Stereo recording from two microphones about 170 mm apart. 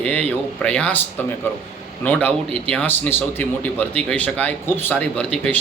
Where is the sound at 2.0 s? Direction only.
10° left (ahead or behind).